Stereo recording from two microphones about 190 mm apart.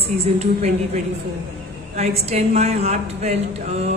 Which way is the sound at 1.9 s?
35° right (ahead or behind).